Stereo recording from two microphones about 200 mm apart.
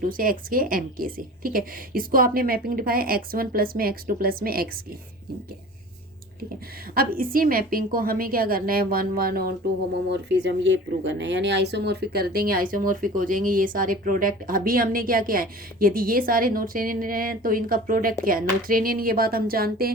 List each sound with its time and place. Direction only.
0.0 s speech: 45° right (ahead or behind)
6.9 s speech: 45° right (ahead or behind)
10.1 s speech: 60° right (ahead or behind)